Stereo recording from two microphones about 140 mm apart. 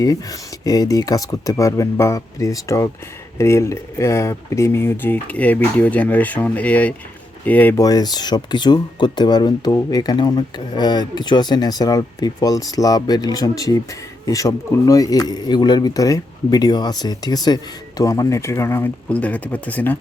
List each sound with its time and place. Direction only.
0.0 s speech: 25° left (ahead or behind)
7.8 s speech: 25° left (ahead or behind)